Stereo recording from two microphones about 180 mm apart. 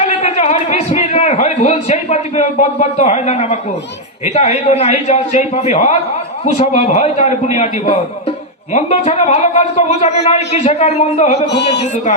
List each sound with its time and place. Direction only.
0.0 s a man's voice: 35° left (ahead or behind)
11.4 s speech: 70° left (ahead or behind)